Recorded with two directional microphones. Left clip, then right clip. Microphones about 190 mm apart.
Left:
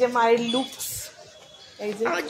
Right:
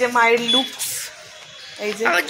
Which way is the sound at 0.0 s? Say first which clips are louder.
Right 4 dB; 25° right (ahead or behind).